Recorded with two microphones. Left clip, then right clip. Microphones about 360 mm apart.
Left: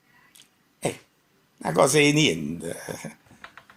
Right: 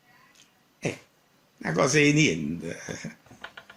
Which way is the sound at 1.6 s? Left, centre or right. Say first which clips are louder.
Left 3 dB; centre.